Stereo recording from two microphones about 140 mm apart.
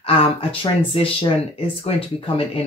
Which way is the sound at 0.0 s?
45° left (ahead or behind).